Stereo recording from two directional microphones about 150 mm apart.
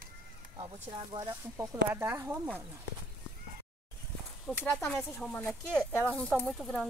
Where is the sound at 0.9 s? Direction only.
30° right (ahead or behind).